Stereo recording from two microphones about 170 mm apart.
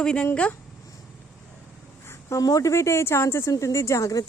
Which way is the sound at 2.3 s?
20° left (ahead or behind).